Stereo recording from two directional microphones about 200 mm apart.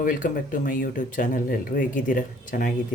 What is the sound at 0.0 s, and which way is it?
Speech, 45° left (ahead or behind).